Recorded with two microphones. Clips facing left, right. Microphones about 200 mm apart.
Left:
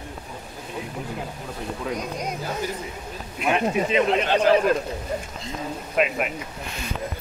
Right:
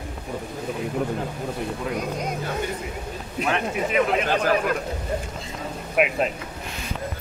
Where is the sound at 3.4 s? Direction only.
15° left (ahead or behind).